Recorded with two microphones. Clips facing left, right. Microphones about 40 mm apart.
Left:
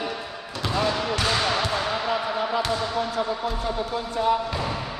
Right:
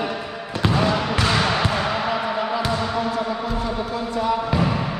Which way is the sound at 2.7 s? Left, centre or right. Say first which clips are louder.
Right 3 dB; right.